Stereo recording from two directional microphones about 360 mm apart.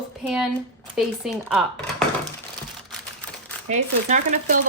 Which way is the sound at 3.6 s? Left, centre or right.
Centre.